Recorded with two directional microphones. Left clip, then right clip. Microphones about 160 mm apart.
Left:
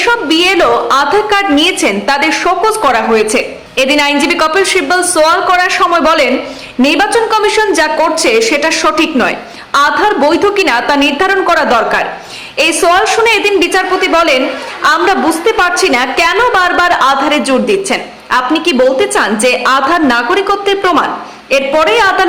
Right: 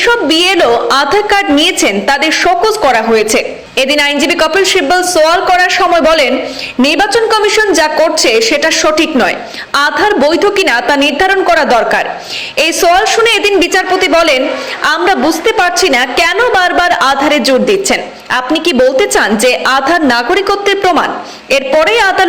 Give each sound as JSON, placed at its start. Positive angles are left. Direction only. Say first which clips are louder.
{"t": 0.0, "sound": "a woman's voice", "louder": "right 1 dB", "side_deg": -15}